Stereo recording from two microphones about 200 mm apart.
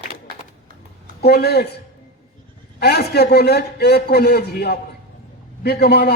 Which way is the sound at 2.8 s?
55° left (ahead or behind).